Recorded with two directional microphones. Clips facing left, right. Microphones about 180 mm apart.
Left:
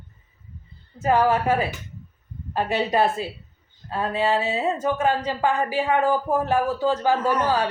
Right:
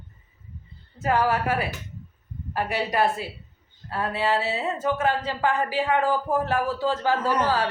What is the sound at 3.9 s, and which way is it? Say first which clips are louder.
Speech: left 2 dB; 15° left (ahead or behind).